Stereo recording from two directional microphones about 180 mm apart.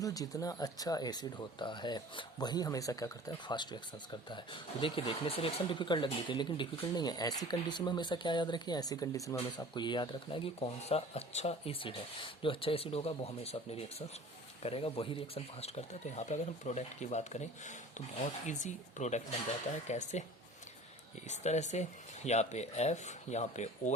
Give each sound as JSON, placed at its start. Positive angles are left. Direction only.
{"t": 0.0, "sound": "speech", "side_deg": 20}
{"t": 21.2, "sound": "speech", "side_deg": 40}